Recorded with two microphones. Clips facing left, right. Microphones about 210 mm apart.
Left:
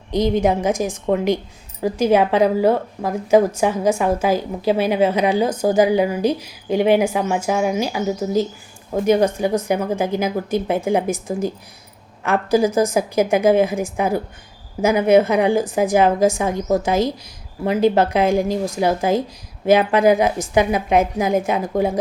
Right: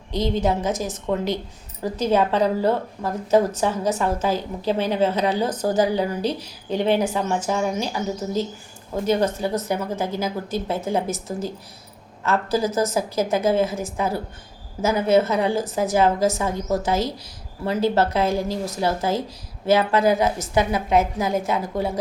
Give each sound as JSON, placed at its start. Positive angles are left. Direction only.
{"t": 0.1, "sound": "speech", "side_deg": 15}